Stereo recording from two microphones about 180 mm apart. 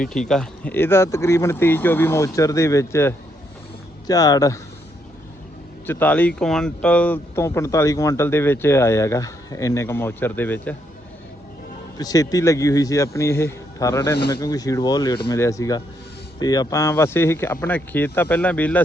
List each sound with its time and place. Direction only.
0.3 s speech: 5° left (ahead or behind)
5.8 s speech: 10° left (ahead or behind)
11.9 s speech: 20° left (ahead or behind)